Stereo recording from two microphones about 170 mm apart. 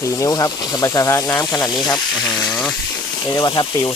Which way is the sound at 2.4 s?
5° left (ahead or behind).